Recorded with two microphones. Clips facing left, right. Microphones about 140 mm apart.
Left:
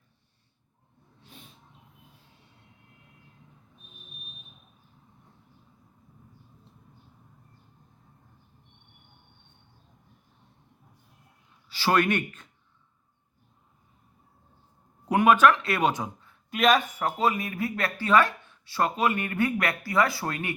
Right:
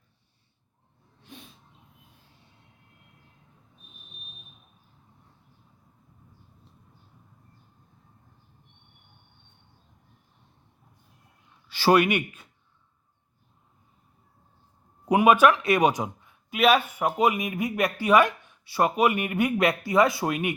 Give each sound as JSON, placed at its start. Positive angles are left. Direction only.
{"t": 11.9, "sound": "speech", "side_deg": -10}
{"t": 15.1, "sound": "speech", "side_deg": -15}